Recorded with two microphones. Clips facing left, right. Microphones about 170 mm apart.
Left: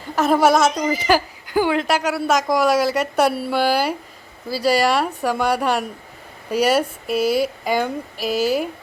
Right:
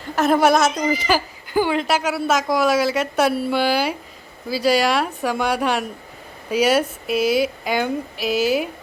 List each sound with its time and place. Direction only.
0.2 s speech: 5° left (ahead or behind)
1.8 s speech: 5° right (ahead or behind)
7.1 s speech: 35° left (ahead or behind)
7.4 s speech: centre (ahead or behind)
8.3 s speech: 35° left (ahead or behind)